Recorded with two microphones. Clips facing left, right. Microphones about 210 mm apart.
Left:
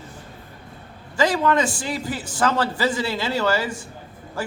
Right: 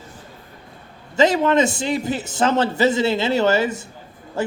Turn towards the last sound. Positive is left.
turn(degrees=-25)  # may be behind; listen again after turning